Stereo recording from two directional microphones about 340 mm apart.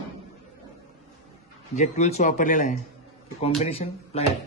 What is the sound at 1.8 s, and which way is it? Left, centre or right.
Speech, centre.